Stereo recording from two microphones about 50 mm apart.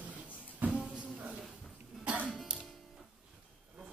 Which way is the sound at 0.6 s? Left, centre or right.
Right.